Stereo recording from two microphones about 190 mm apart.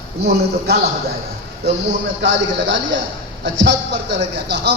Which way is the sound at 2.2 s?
75° right (ahead or behind).